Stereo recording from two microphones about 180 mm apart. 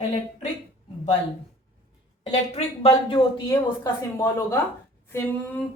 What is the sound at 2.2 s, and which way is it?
Speech, 35° left (ahead or behind).